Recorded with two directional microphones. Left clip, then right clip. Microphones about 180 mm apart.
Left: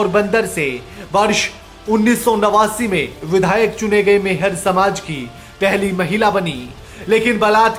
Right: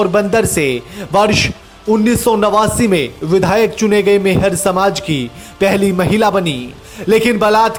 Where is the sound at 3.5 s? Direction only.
40° right (ahead or behind).